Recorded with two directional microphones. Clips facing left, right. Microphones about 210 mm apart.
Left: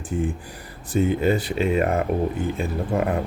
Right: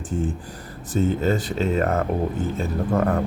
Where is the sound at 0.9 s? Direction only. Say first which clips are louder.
Left 1 dB; 10° left (ahead or behind).